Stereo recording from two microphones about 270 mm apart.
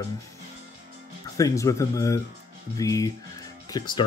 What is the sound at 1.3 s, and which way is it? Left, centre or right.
Speech, centre.